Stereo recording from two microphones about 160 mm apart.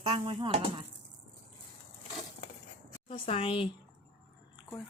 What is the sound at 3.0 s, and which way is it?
Speech, 35° left (ahead or behind).